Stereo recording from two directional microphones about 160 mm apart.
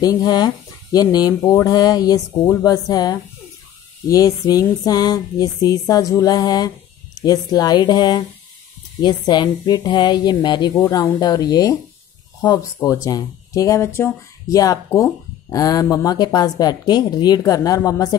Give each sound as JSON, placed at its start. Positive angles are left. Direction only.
{"t": 0.0, "sound": "speech", "side_deg": 25}